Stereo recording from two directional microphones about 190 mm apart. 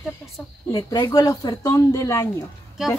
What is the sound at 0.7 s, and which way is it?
Speech, 20° left (ahead or behind).